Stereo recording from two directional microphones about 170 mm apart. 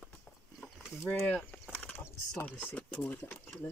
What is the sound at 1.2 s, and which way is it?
Speech, 5° left (ahead or behind).